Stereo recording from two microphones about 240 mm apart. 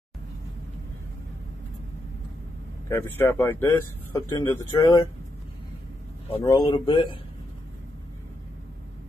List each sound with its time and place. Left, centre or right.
2.9 s speech: centre
6.3 s speech: centre